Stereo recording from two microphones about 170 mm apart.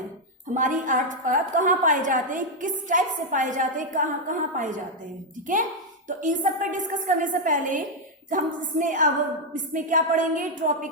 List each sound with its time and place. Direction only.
0.5 s a woman's voice: 50° right (ahead or behind)
6.1 s a woman's voice: 50° right (ahead or behind)